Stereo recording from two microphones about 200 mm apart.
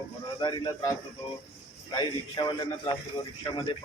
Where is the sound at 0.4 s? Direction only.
20° left (ahead or behind).